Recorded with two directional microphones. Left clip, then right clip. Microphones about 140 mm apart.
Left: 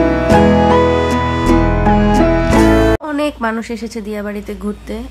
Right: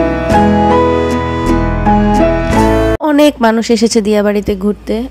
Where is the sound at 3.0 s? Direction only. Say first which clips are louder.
Right 9 dB; 45° right (ahead or behind).